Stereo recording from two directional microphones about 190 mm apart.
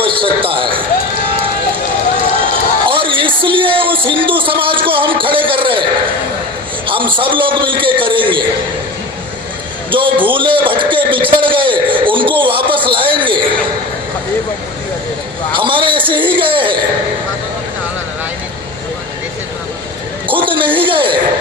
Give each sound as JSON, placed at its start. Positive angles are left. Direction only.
{"t": 0.0, "sound": "basketball bounce", "side_deg": -30}
{"t": 2.4, "sound": "a sound", "side_deg": -25}
{"t": 6.8, "sound": "a man's voice", "side_deg": -25}
{"t": 10.3, "sound": "a man's voice", "side_deg": -25}
{"t": 15.5, "sound": "a man's voice", "side_deg": -25}
{"t": 20.2, "sound": "speech", "side_deg": -25}